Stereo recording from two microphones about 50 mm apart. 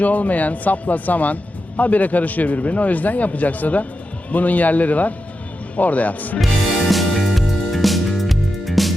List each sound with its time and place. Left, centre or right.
0.0 s speech: left
6.9 s music: centre